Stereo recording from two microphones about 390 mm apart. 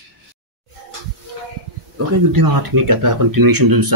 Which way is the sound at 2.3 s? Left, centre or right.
Right.